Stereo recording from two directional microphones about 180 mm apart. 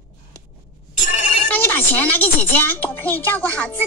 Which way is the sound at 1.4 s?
10° left (ahead or behind).